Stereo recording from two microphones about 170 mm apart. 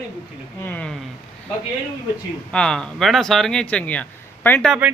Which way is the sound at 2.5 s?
5° left (ahead or behind).